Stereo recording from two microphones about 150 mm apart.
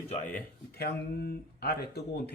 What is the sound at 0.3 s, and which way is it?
Speech, 90° left.